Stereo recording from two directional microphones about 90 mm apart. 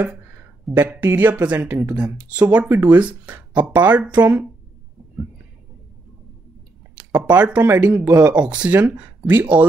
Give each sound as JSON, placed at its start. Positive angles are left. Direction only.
{"t": 1.0, "sound": "speech", "side_deg": -20}
{"t": 2.7, "sound": "speech", "side_deg": -25}
{"t": 7.0, "sound": "speech", "side_deg": -15}